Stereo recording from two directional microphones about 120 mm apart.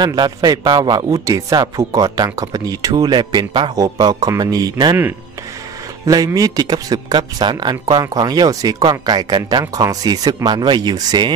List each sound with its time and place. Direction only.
0.0 s a man's voice: 35° right (ahead or behind)
6.0 s speech: 30° right (ahead or behind)